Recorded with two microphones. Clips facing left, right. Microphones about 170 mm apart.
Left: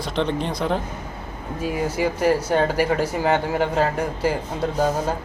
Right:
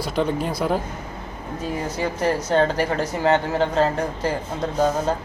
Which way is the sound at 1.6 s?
10° left (ahead or behind).